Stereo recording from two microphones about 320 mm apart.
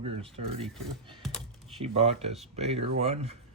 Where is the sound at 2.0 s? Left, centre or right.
Centre.